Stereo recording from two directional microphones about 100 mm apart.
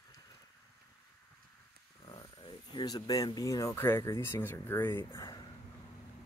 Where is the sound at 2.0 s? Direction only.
50° left (ahead or behind).